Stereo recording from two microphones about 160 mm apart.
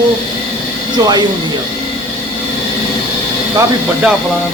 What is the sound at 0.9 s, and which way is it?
Speech, 25° right (ahead or behind).